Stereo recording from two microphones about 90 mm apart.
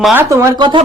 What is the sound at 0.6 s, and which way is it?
Speech, 65° right (ahead or behind).